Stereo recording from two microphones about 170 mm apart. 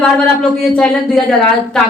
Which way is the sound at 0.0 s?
5° left (ahead or behind).